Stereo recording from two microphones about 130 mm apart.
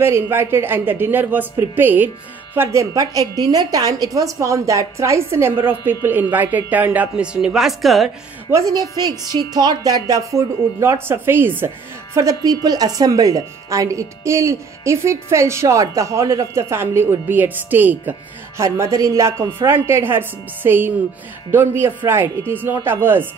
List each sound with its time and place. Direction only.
0.0 s speech: 20° right (ahead or behind); by 8.1 s centre (ahead or behind)
8.5 s a woman's voice: 25° right (ahead or behind)